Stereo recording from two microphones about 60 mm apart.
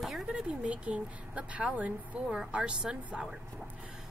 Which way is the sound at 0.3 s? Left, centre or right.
Centre.